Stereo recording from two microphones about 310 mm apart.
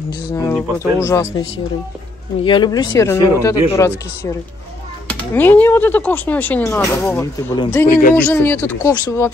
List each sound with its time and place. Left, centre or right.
0.3 s speech: centre
2.4 s speech: centre
5.3 s speech: centre
7.9 s speech: left
8.3 s speech: centre